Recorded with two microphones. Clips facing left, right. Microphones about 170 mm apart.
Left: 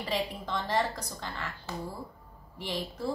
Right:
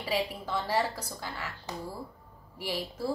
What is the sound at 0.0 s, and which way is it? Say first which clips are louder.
Speech: right 1 dB; 10° right (ahead or behind).